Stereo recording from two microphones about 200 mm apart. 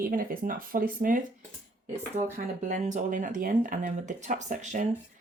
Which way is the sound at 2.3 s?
40° right (ahead or behind).